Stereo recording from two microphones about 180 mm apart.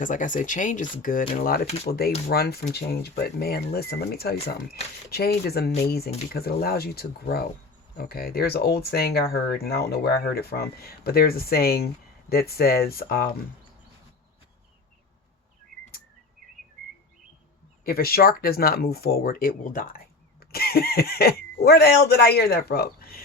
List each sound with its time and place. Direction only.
0.0 s speech: 45° left (ahead or behind)
17.8 s speech: 55° left (ahead or behind)